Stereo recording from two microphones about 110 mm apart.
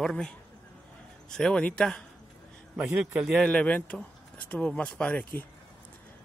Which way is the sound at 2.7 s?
10° right (ahead or behind).